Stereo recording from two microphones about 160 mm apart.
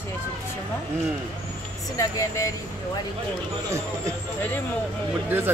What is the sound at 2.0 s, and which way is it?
Speech, 20° left (ahead or behind).